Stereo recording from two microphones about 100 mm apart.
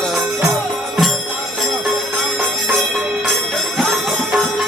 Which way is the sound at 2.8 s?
5° left (ahead or behind).